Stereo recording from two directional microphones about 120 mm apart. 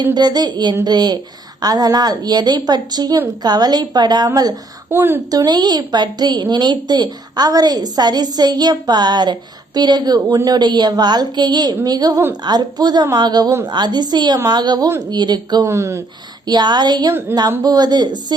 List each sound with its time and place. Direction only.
0.0 s speech: 35° right (ahead or behind)
4.9 s a woman's voice: 15° right (ahead or behind)
5.5 s speech: 35° right (ahead or behind)
15.7 s speech: 25° right (ahead or behind)
16.5 s speech: 35° right (ahead or behind)